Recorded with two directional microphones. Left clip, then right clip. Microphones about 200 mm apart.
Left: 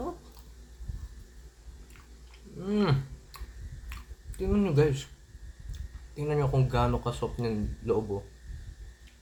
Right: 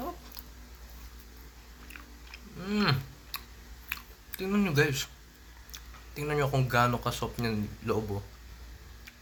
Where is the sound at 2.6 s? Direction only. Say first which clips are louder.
Even; 10° right (ahead or behind).